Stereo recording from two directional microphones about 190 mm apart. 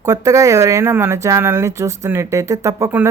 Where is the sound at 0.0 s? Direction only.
15° right (ahead or behind).